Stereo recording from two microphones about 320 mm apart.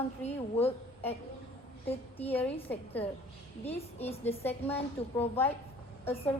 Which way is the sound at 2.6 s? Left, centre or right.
Centre.